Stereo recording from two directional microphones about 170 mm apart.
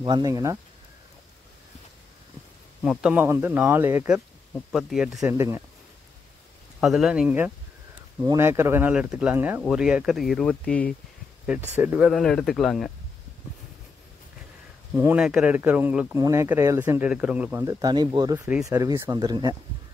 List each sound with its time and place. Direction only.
0.0 s speech: 25° right (ahead or behind)
2.8 s speech: 5° right (ahead or behind)
4.7 s speech: centre (ahead or behind)
6.8 s speech: centre (ahead or behind)
11.4 s speech: 10° right (ahead or behind)
12.1 s speech: 5° left (ahead or behind)
15.0 s speech: 10° right (ahead or behind); by 19.5 s 25° right (ahead or behind)